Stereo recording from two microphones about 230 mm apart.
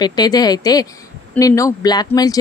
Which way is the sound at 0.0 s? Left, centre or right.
Centre.